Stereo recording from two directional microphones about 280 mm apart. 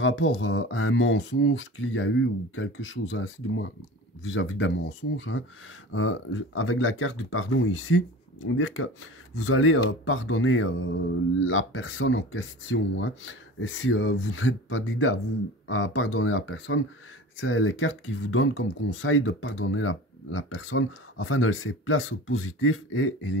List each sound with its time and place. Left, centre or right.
0.0 s speech: left